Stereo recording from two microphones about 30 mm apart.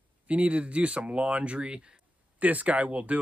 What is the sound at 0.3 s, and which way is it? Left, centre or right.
Speech, right.